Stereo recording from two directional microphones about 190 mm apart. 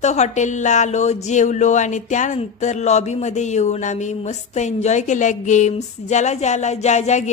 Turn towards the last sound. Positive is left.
turn(degrees=40)  # may be behind; listen again after turning